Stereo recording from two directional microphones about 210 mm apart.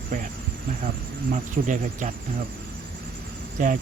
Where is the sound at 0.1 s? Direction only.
40° right (ahead or behind).